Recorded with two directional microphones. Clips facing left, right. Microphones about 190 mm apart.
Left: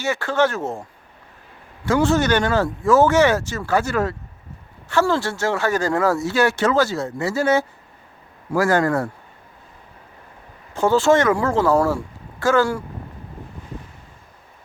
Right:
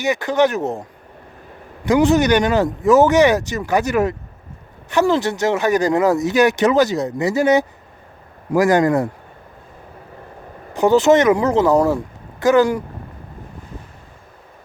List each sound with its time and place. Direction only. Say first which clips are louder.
0.0 s speech: right 3 dB; 15° right (ahead or behind)
10.8 s speech: right 3 dB; 20° right (ahead or behind)